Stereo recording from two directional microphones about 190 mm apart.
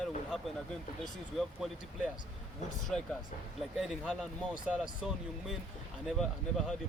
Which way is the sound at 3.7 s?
Centre (ahead or behind).